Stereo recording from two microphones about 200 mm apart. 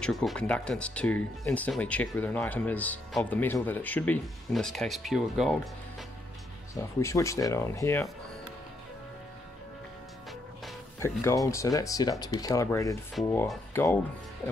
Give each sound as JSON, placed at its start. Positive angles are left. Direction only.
{"t": 0.0, "sound": "speech", "side_deg": 0}
{"t": 6.7, "sound": "speech", "side_deg": 15}
{"t": 11.0, "sound": "speech", "side_deg": 15}